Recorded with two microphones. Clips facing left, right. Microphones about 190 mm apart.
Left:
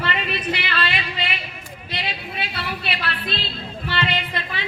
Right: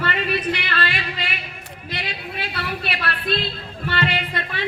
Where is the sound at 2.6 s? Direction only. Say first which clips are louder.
Right 2 dB; 50° right (ahead or behind).